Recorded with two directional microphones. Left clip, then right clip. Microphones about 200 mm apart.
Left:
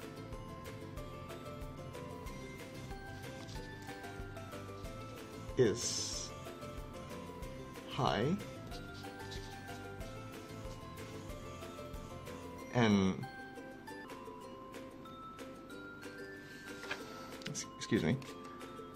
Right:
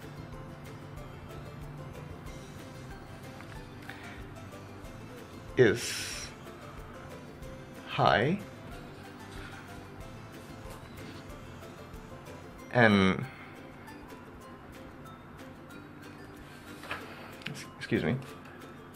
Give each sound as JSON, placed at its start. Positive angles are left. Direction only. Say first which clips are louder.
{"t": 5.6, "sound": "speech", "louder": "right 7 dB", "side_deg": 15}
{"t": 7.9, "sound": "speech", "louder": "right 9 dB", "side_deg": 25}
{"t": 12.7, "sound": "speech", "louder": "right 9 dB", "side_deg": 20}
{"t": 17.8, "sound": "speech", "louder": "right 4 dB", "side_deg": 45}